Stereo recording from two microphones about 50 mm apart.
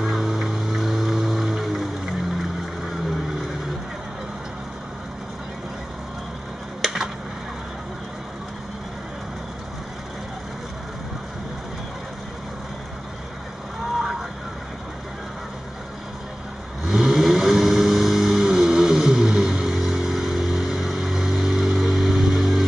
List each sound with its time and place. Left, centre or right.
0.0 s music: centre
6.8 s a sound: centre
16.8 s vehicle: centre